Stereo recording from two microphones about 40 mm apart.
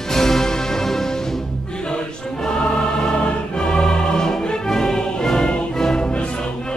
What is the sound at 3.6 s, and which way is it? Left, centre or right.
Music, centre.